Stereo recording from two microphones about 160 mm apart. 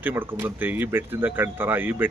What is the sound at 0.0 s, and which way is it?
Speech, 10° right (ahead or behind).